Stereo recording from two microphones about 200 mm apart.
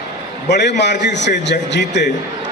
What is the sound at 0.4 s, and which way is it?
A man's voice, 60° left (ahead or behind).